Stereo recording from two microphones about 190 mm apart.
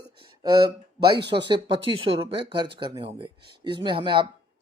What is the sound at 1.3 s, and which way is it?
Speech, 25° right (ahead or behind).